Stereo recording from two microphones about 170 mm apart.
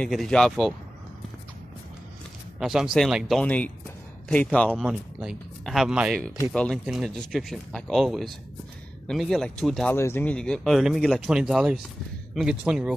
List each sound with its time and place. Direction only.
0.0 s speech: 5° left (ahead or behind)
2.6 s a man's voice: 5° right (ahead or behind)
9.9 s speech: 15° left (ahead or behind); by 12.9 s 5° right (ahead or behind)